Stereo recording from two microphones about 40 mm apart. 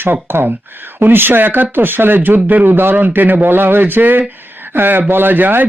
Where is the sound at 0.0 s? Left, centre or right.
Right.